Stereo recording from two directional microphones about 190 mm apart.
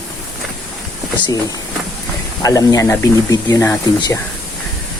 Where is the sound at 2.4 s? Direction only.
20° left (ahead or behind).